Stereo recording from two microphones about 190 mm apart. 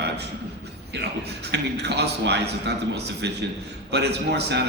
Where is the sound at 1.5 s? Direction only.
60° right (ahead or behind).